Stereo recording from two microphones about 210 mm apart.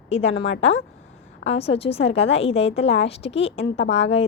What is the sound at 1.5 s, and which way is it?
A woman's voice, 30° left (ahead or behind).